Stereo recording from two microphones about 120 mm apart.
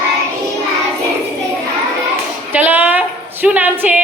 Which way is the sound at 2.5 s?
15° right (ahead or behind).